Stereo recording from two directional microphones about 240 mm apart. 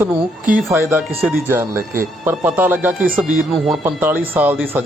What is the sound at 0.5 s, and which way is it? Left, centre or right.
A man's voice, centre.